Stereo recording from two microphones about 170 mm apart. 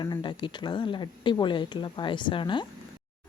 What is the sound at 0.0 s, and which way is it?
Speech, 25° left (ahead or behind).